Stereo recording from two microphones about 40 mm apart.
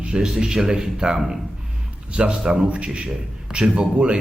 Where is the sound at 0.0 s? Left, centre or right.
Right.